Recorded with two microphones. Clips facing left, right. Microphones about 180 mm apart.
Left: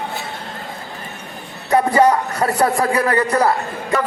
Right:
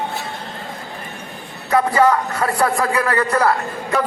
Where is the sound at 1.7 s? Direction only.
20° left (ahead or behind).